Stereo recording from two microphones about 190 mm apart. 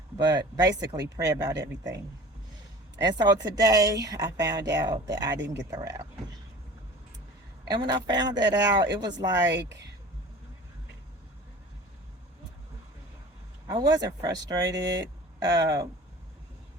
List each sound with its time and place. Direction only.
0.2 s a woman's voice: 20° right (ahead or behind)
3.0 s a woman's voice: 20° right (ahead or behind)
7.7 s a woman's voice: 20° right (ahead or behind)
9.5 s speech: 65° right (ahead or behind)
13.7 s a woman's voice: 20° right (ahead or behind)